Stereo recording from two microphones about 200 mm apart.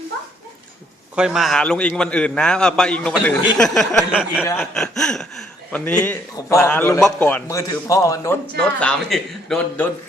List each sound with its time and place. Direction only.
1.1 s a man's voice: 5° right (ahead or behind); by 8.4 s 15° left (ahead or behind)
8.5 s a man's voice: 5° left (ahead or behind)